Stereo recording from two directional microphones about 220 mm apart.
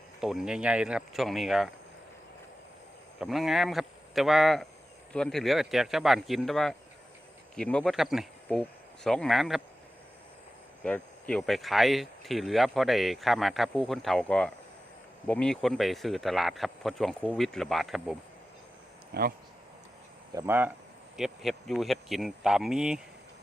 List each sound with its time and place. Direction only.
0.2 s speech: centre (ahead or behind)
3.2 s speech: centre (ahead or behind)
10.8 s speech: 5° left (ahead or behind)
19.1 s speech: 45° right (ahead or behind)
20.3 s speech: 10° right (ahead or behind)